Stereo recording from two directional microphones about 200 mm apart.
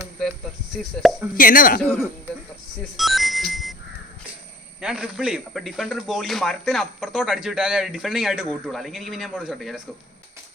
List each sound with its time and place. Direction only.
1.0 s a man's voice: centre (ahead or behind)
1.4 s speech: 45° left (ahead or behind)
1.8 s speech: 5° left (ahead or behind)
3.0 s music: centre (ahead or behind)
4.8 s a man's voice: 5° right (ahead or behind)